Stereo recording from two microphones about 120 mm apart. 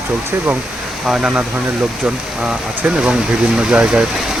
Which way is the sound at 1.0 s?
5° right (ahead or behind).